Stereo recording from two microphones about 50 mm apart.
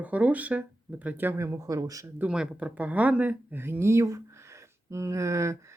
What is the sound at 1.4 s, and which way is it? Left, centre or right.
Speech, right.